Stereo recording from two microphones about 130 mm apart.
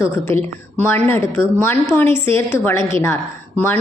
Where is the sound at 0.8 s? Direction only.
15° left (ahead or behind).